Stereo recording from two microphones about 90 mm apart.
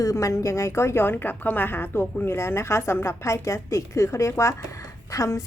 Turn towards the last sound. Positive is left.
turn(degrees=35)  # may be behind; listen again after turning